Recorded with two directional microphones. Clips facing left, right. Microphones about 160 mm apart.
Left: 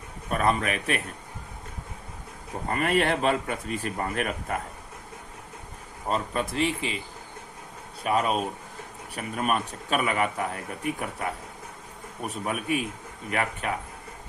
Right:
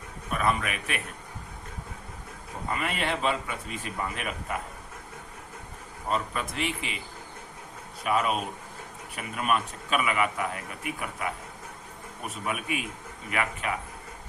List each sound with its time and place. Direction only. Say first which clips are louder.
0.3 s speech: left 3 dB; 40° left (ahead or behind)
2.6 s speech: left 6 dB; 50° left (ahead or behind)
6.1 s speech: left 2 dB; 35° left (ahead or behind)
8.0 s speech: left 2 dB; 35° left (ahead or behind)
12.3 s speech: left 4 dB; 40° left (ahead or behind)